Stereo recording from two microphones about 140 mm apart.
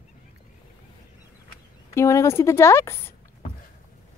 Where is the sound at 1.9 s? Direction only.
20° left (ahead or behind).